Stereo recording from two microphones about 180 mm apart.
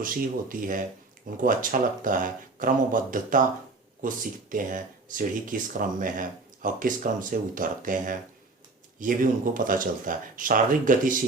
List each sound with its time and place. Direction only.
0.0 s speech: 50° right (ahead or behind)